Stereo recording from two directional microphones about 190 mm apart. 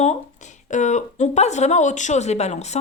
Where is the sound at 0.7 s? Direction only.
40° left (ahead or behind).